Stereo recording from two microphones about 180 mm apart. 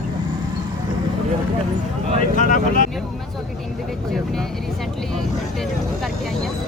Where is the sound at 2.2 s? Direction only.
45° left (ahead or behind).